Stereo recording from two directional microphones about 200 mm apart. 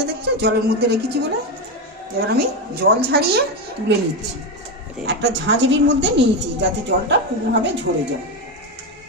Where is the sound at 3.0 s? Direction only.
55° right (ahead or behind).